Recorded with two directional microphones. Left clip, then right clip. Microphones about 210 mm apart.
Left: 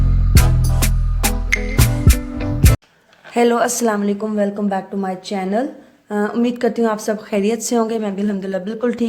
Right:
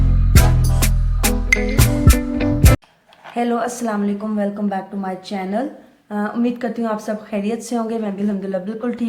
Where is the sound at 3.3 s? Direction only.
45° left (ahead or behind).